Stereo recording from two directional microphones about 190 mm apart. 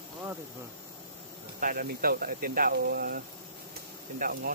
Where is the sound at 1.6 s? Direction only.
50° right (ahead or behind).